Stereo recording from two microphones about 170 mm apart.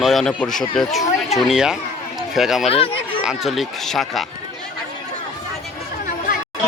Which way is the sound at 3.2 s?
Centre (ahead or behind).